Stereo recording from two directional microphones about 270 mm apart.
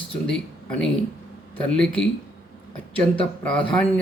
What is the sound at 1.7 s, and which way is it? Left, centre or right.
Speech, centre.